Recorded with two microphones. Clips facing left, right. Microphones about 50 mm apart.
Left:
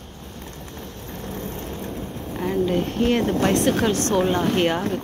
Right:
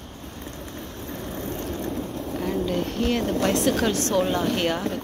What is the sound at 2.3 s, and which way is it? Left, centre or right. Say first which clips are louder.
Speech: left 4 dB; centre.